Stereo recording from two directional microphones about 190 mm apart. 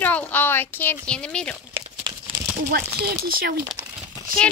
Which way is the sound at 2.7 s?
60° right (ahead or behind).